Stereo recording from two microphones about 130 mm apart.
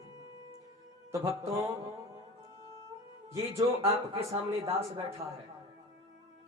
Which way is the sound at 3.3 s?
25° right (ahead or behind).